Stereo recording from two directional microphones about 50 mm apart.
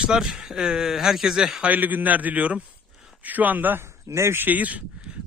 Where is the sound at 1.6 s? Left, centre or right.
Right.